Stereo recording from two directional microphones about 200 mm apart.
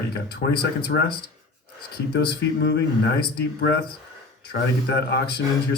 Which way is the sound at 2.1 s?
55° left (ahead or behind).